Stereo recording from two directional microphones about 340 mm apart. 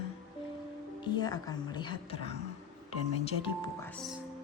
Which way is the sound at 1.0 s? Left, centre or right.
Centre.